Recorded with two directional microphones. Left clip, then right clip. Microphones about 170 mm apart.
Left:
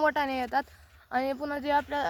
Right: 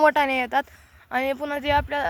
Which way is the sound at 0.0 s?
50° right (ahead or behind).